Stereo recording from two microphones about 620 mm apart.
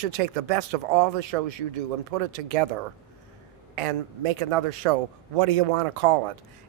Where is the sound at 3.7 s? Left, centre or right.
Right.